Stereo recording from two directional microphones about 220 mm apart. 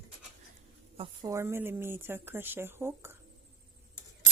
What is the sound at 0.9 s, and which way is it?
Speech, 20° right (ahead or behind).